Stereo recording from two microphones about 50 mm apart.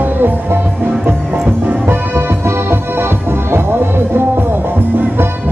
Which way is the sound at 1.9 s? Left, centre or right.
Right.